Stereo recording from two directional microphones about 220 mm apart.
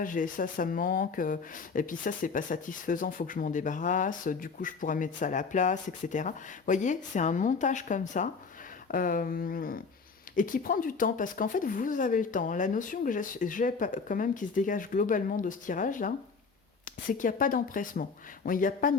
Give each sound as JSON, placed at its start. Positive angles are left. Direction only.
{"t": 0.0, "sound": "speech", "side_deg": 40}